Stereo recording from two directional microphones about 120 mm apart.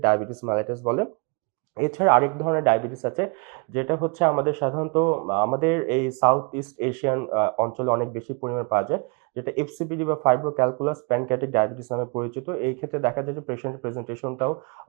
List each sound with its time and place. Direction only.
0.0 s a man's voice: 25° right (ahead or behind)